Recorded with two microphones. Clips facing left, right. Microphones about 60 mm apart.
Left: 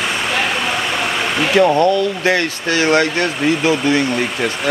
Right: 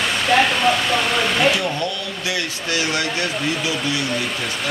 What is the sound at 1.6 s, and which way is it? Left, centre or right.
Speech, left.